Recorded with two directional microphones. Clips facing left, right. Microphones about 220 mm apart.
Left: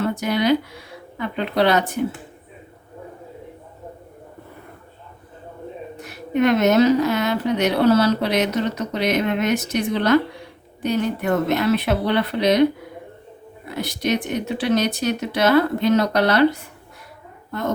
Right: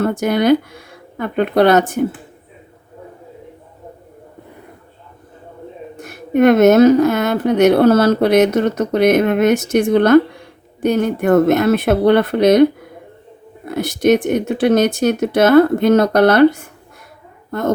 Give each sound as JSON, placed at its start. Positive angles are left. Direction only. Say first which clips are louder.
{"t": 0.0, "sound": "a woman's voice", "louder": "right 5 dB", "side_deg": -50}
{"t": 6.0, "sound": "a woman's voice", "louder": "right 6 dB", "side_deg": -50}
{"t": 13.7, "sound": "a woman's voice", "louder": "right 9 dB", "side_deg": -50}